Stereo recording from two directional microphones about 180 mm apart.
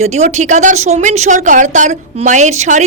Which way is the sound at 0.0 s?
40° right (ahead or behind).